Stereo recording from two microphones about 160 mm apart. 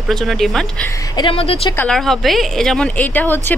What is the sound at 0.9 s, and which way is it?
Speech, 25° left (ahead or behind).